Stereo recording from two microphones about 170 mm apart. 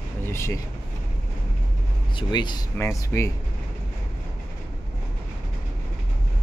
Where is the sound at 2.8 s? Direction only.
15° left (ahead or behind).